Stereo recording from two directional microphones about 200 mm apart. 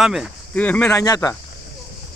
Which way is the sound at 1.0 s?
15° left (ahead or behind).